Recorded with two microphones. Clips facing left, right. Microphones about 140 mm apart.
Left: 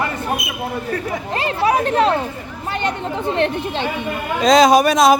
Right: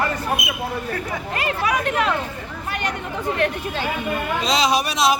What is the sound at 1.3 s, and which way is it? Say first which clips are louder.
Speech: left 5 dB; 30° left (ahead or behind).